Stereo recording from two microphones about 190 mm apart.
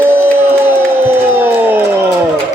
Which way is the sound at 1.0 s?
10° right (ahead or behind).